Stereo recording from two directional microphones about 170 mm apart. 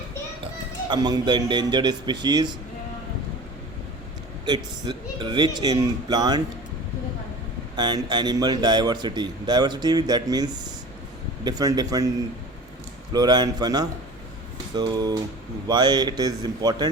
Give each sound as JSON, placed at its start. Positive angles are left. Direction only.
{"t": 0.9, "sound": "a man's voice", "side_deg": -25}
{"t": 4.4, "sound": "a man's voice", "side_deg": -25}
{"t": 7.8, "sound": "a man's voice", "side_deg": -25}
{"t": 13.1, "sound": "a man's voice", "side_deg": -25}